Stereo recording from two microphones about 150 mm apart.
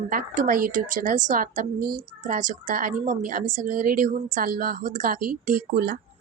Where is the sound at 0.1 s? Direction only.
65° right (ahead or behind); by 6.0 s 90° right.